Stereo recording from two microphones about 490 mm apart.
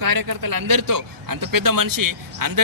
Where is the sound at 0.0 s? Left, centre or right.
Right.